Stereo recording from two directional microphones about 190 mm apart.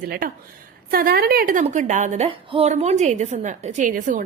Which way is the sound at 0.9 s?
50° right (ahead or behind).